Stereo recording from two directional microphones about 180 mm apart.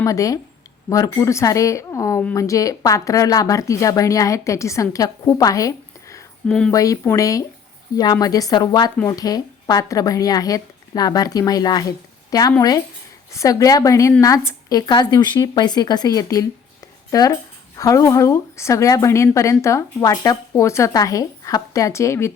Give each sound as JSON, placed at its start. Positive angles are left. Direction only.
{"t": 0.0, "sound": "a woman's voice", "side_deg": 20}